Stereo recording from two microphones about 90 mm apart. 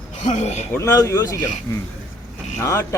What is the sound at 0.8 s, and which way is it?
Speech, 35° left (ahead or behind).